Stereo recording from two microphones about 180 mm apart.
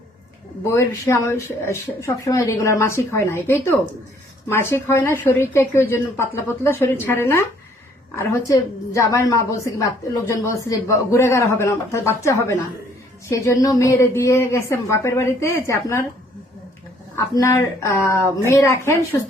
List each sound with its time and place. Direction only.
0.7 s a woman's voice: 15° left (ahead or behind)
17.2 s a woman's voice: 15° left (ahead or behind)